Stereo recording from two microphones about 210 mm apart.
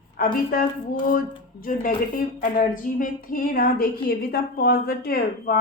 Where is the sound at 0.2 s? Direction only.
40° left (ahead or behind).